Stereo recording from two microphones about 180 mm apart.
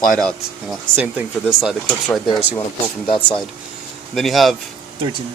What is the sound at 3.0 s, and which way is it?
Speech, 30° left (ahead or behind).